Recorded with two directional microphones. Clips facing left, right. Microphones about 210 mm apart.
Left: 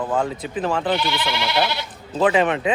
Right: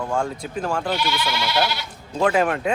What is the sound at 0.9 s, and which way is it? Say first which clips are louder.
Speech: left 1 dB; 25° left (ahead or behind).